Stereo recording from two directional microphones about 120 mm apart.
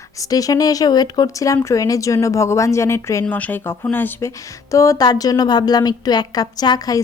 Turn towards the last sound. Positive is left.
turn(degrees=35)  # may be behind; listen again after turning